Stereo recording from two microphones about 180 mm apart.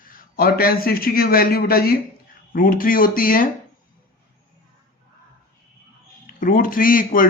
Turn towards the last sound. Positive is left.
turn(degrees=50)  # may be behind; listen again after turning